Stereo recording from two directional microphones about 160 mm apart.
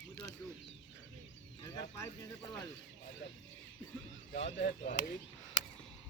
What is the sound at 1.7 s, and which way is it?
Speech, 15° left (ahead or behind).